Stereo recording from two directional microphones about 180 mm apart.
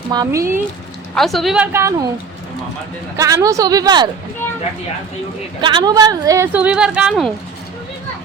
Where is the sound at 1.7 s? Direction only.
15° right (ahead or behind).